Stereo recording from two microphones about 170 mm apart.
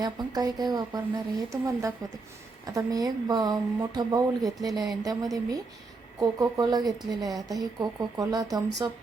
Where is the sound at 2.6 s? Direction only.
20° right (ahead or behind).